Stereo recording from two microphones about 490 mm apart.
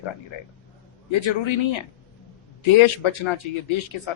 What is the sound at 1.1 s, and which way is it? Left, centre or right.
Speech, left.